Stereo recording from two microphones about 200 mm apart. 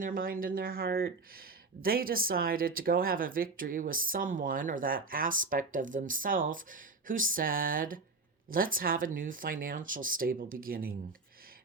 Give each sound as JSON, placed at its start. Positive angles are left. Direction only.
{"t": 0.0, "sound": "speech", "side_deg": -45}